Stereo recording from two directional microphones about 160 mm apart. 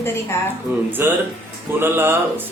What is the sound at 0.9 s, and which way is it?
A man's voice, 10° right (ahead or behind).